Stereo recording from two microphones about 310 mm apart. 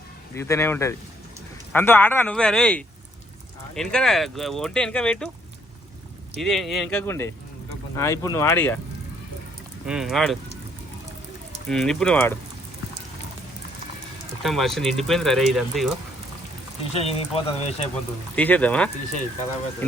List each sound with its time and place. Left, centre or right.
0.3 s speech: centre
6.4 s speech: centre
9.8 s speech: centre
11.7 s speech: centre
14.4 s speech: centre
16.9 s speech: centre
18.3 s speech: centre